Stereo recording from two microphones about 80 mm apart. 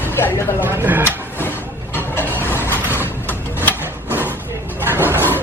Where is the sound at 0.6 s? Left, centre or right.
Right.